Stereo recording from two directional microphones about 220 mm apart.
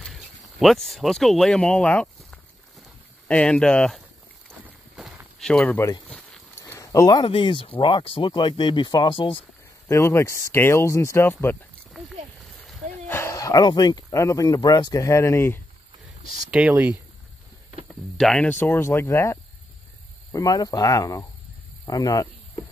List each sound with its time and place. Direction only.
0.0 s speech: centre (ahead or behind)
4.5 s walk: centre (ahead or behind)
6.1 s a sound: 5° left (ahead or behind)
6.6 s speech: 15° left (ahead or behind)
11.9 s a sound: centre (ahead or behind)
12.6 s speech: 10° left (ahead or behind)
16.4 s speech: 5° right (ahead or behind)
18.1 s speech: 5° left (ahead or behind)